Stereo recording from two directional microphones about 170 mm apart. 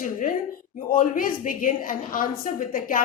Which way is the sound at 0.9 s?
55° left (ahead or behind).